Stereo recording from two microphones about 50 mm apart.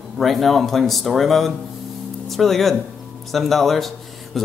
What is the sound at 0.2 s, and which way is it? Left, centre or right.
Speech, centre.